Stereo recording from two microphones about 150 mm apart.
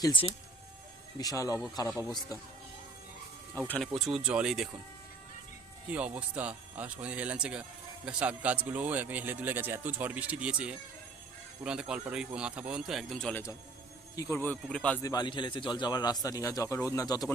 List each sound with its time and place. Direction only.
0.0 s a man's voice: 35° left (ahead or behind)
3.7 s a man's voice: centre (ahead or behind)
5.9 s a man's voice: 10° right (ahead or behind)
14.2 s speech: 20° left (ahead or behind)
15.0 s a man's voice: 25° left (ahead or behind)